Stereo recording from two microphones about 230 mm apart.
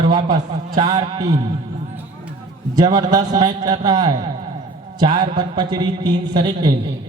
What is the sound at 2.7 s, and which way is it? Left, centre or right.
A man's voice, centre.